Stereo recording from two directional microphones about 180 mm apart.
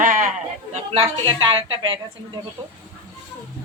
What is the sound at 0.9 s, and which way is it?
A woman's voice, 30° right (ahead or behind).